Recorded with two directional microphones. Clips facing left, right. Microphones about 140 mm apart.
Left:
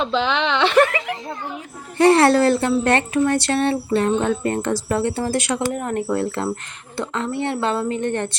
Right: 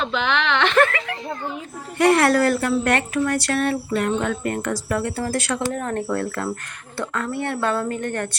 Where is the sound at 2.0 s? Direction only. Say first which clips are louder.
Left 3 dB; 30° left (ahead or behind).